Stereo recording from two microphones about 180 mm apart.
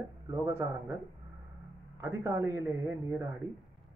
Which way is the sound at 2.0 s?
15° right (ahead or behind).